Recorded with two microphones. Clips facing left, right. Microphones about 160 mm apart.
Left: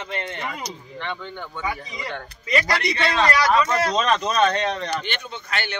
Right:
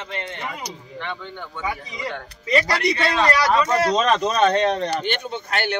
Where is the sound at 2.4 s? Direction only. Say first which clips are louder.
Right 3 dB; 30° right (ahead or behind).